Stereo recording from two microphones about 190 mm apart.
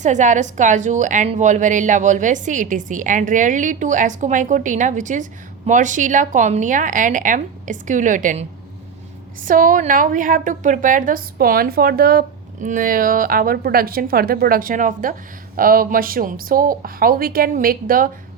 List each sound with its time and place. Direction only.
0.0 s a woman's voice: 40° right (ahead or behind)